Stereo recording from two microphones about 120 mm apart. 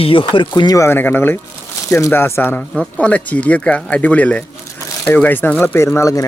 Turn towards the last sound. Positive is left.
turn(degrees=25)  # may be behind; listen again after turning